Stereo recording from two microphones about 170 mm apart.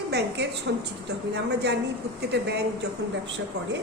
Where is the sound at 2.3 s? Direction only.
80° right.